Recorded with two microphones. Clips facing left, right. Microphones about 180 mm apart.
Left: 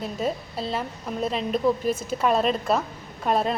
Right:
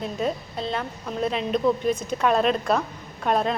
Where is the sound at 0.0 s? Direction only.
Centre (ahead or behind).